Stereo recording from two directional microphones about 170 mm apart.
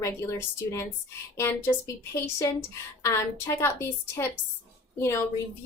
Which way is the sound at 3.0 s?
15° left (ahead or behind).